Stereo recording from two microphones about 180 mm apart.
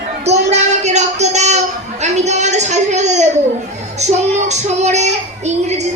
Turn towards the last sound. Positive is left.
turn(degrees=-40)  # may be behind; listen again after turning